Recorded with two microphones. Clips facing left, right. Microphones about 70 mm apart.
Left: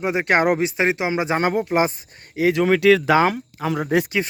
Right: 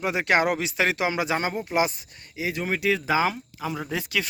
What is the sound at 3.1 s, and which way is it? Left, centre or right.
Speech, left.